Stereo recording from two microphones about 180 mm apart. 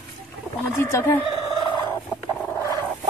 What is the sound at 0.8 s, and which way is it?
Speech, 10° left (ahead or behind).